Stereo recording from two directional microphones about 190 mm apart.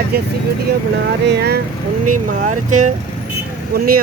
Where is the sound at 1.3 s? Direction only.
55° right (ahead or behind).